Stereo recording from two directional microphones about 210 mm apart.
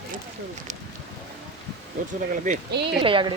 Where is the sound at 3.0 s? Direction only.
25° right (ahead or behind).